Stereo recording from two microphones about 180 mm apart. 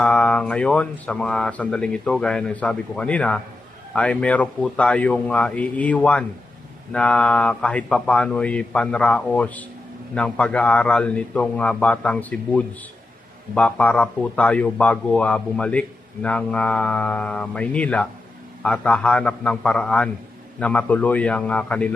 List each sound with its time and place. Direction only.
0.0 s speech: 5° left (ahead or behind)